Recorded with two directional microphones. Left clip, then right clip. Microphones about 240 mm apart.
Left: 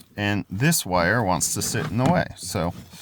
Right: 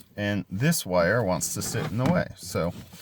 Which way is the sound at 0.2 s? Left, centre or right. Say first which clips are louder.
Left 4 dB; left.